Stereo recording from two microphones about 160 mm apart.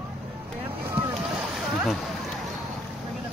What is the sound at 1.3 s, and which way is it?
Boat, centre (ahead or behind).